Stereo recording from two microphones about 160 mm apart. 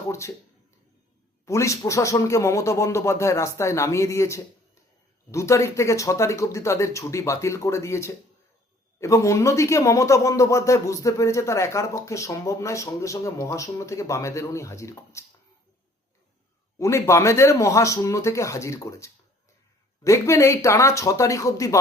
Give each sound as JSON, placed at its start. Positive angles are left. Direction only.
{"t": 1.5, "sound": "speech", "side_deg": 20}
{"t": 16.7, "sound": "speech", "side_deg": 20}